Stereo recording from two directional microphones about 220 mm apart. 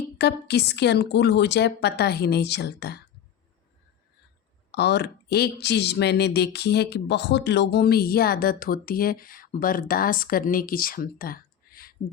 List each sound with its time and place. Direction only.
0.2 s speech: 50° left (ahead or behind)
4.7 s speech: 50° left (ahead or behind)